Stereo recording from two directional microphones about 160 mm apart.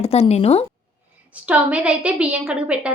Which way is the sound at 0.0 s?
40° left (ahead or behind).